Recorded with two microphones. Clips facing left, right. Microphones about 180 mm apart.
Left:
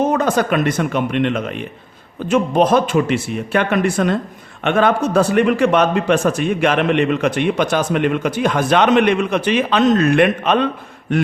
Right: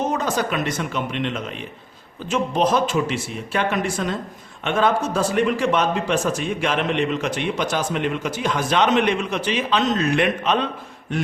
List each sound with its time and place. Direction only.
0.0 s a man's voice: 55° left (ahead or behind)